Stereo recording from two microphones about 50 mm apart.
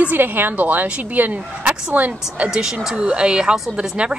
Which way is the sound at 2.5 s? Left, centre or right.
Centre.